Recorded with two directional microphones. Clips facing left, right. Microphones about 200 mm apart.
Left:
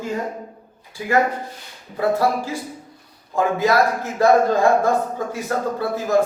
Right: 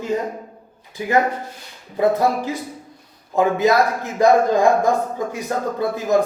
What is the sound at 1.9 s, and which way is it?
Speech, 20° right (ahead or behind).